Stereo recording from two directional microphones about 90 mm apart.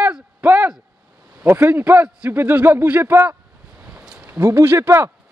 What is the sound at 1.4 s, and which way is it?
A man's voice, 25° right (ahead or behind).